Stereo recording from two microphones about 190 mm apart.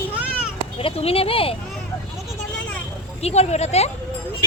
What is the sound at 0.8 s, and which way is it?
Speech, 30° left (ahead or behind).